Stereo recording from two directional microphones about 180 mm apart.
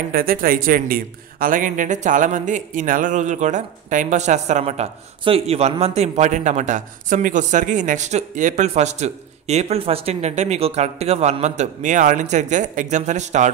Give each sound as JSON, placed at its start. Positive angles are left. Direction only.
{"t": 0.1, "sound": "speech", "side_deg": -50}